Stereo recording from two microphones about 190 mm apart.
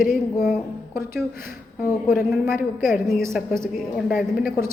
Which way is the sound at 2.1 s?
10° right (ahead or behind).